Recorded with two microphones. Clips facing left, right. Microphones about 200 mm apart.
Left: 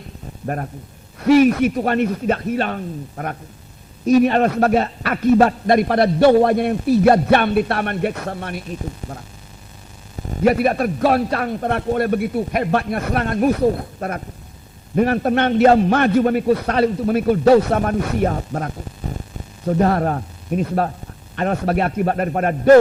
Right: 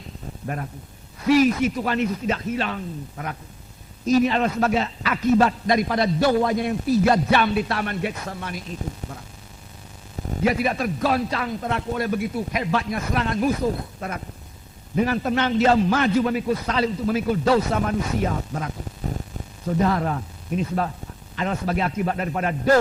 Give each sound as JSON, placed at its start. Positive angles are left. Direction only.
{"t": 0.4, "sound": "a man's voice", "side_deg": 45}
{"t": 1.2, "sound": "a man's voice", "side_deg": 60}
{"t": 10.4, "sound": "a man's voice", "side_deg": 55}
{"t": 14.9, "sound": "a man's voice", "side_deg": 55}
{"t": 19.1, "sound": "speech", "side_deg": 0}
{"t": 19.6, "sound": "a man's voice", "side_deg": 50}